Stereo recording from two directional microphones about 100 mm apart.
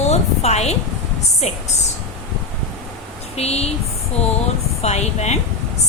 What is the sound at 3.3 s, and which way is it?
Speech, 90° left.